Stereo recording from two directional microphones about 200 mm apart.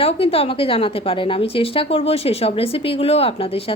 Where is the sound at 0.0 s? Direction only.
30° left (ahead or behind).